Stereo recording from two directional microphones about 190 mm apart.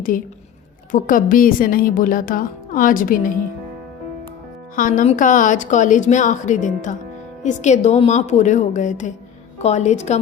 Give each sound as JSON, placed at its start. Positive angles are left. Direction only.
{"t": 0.9, "sound": "a woman's voice", "side_deg": 45}
{"t": 4.7, "sound": "a woman's voice", "side_deg": 45}